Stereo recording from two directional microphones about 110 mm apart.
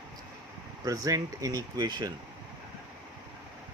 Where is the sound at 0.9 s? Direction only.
30° right (ahead or behind).